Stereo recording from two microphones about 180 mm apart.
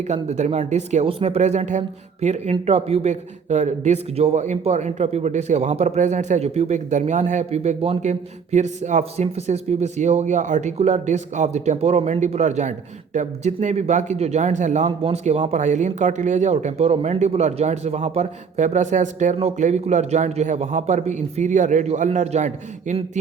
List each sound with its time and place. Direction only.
0.0 s speech: 40° right (ahead or behind)